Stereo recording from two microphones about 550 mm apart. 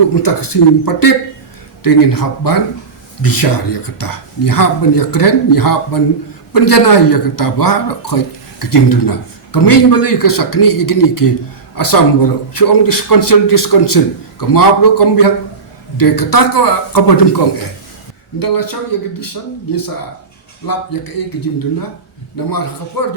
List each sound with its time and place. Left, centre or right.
0.2 s speech: left
20.7 s speech: left
22.4 s speech: left